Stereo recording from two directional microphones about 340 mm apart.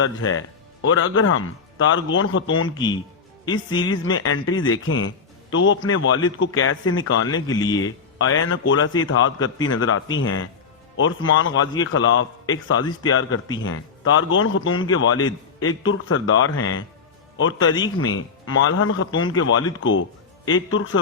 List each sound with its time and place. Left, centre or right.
0.0 s a man's voice: left
2.7 s speech: centre
3.8 s a man's voice: left
7.4 s speech: centre
8.2 s a man's voice: left